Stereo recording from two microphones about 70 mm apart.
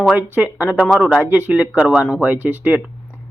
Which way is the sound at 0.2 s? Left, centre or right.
Right.